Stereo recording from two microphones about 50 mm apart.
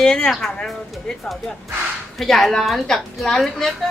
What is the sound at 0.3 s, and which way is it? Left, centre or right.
Speech, centre.